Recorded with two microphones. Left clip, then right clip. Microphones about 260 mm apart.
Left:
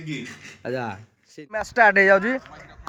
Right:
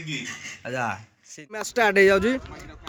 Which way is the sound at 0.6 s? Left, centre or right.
Centre.